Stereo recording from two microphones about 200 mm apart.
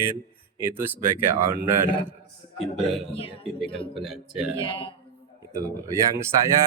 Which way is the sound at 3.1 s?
30° left (ahead or behind).